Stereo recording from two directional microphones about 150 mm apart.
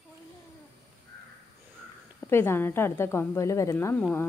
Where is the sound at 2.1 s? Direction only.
15° left (ahead or behind).